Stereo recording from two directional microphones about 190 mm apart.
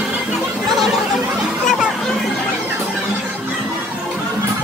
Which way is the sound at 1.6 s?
Centre (ahead or behind).